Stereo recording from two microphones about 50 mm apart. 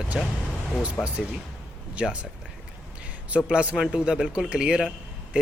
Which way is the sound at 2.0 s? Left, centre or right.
Right.